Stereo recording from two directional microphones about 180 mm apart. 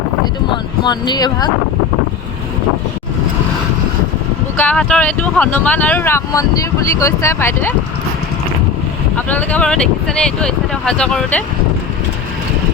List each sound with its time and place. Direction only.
0.5 s speech: 25° left (ahead or behind)
4.5 s speech: 10° left (ahead or behind)
9.1 s speech: 10° left (ahead or behind)